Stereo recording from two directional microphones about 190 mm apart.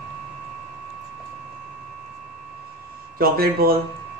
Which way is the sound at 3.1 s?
55° right (ahead or behind).